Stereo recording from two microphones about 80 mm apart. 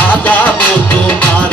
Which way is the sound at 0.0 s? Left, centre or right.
Left.